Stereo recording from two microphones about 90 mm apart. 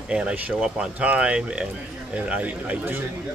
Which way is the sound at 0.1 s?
10° right (ahead or behind).